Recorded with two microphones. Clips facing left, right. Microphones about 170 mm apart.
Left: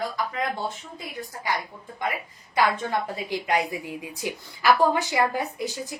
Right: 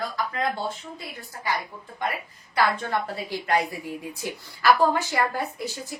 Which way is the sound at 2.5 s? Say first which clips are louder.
Left 1 dB; 20° left (ahead or behind).